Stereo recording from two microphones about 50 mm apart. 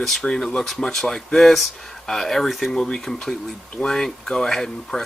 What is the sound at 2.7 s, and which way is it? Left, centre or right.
Speech, centre.